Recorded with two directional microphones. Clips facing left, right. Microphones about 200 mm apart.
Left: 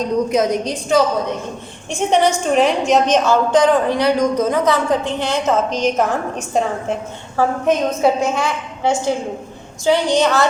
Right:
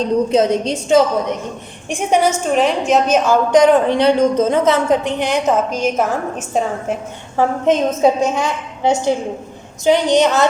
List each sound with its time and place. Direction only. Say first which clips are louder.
0.0 s a woman's voice: right 2 dB; 30° right (ahead or behind)
1.9 s a woman's voice: even; 10° right (ahead or behind)
3.2 s speech: right 2 dB; 20° right (ahead or behind); by 6.9 s 5° right (ahead or behind)
7.3 s a woman's voice: right 2 dB; 20° right (ahead or behind)